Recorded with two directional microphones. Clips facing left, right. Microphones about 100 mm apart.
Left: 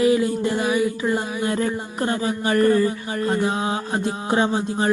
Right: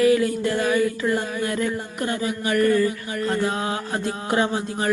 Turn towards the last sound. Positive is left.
turn(degrees=25)  # may be behind; listen again after turning